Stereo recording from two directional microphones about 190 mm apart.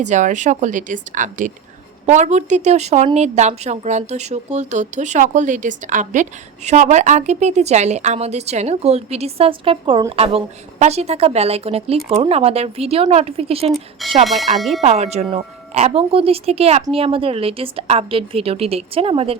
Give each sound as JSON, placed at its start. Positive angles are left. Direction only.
{"t": 0.0, "sound": "a woman's voice", "side_deg": -40}
{"t": 14.0, "sound": "speech", "side_deg": 0}
{"t": 14.8, "sound": "a woman's voice", "side_deg": -35}